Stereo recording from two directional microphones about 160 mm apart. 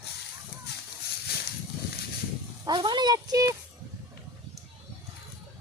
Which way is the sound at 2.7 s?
30° right (ahead or behind).